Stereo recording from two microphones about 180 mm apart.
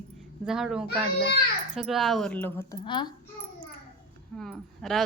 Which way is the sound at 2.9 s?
25° left (ahead or behind).